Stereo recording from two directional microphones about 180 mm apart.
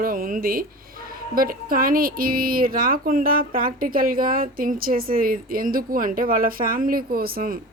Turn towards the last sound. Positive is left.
turn(degrees=-55)  # may be behind; listen again after turning